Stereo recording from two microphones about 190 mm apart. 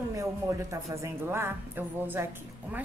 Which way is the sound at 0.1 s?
15° right (ahead or behind).